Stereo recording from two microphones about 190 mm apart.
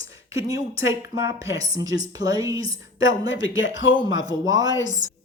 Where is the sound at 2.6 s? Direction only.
90° left.